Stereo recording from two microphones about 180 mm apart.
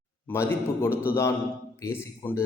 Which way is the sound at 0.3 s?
15° left (ahead or behind).